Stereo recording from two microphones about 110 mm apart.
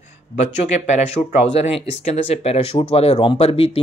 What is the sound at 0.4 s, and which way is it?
Speech, 90° left.